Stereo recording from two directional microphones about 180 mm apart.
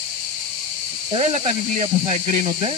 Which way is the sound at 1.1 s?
35° right (ahead or behind).